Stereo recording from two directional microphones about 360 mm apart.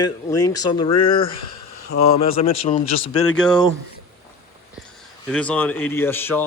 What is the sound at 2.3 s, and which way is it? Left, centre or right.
Speech, centre.